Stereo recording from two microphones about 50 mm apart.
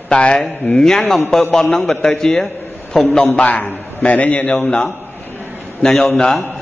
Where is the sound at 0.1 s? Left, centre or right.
Centre.